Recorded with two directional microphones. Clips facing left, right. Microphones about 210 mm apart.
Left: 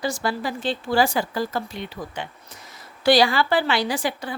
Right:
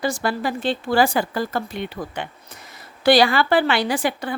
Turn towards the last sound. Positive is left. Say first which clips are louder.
# right 3 dB
turn(degrees=-60)  # may be behind; listen again after turning